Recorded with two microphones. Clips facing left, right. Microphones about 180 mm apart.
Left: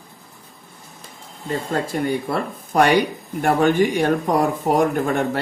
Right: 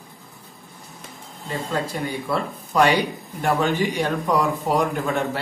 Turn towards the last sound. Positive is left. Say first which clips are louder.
# left 3 dB
turn(degrees=50)  # may be behind; listen again after turning